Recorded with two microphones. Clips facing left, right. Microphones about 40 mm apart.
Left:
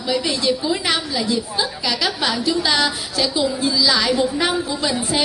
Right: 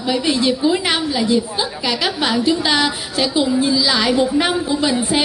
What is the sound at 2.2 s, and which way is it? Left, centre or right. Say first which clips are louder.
A woman's voice: right 4 dB; right.